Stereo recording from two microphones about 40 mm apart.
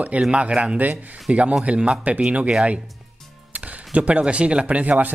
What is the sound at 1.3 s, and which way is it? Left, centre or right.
Speech, right.